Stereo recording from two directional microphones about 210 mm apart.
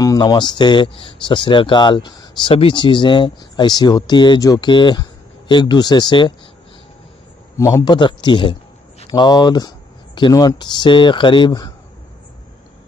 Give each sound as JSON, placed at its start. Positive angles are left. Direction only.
{"t": 0.0, "sound": "speech", "side_deg": 15}
{"t": 7.5, "sound": "speech", "side_deg": 15}